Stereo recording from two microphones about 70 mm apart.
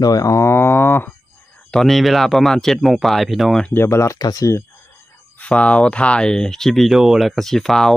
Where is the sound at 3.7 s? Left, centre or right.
Left.